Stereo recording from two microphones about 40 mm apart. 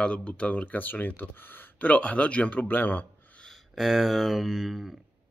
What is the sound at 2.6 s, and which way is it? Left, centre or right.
Speech, left.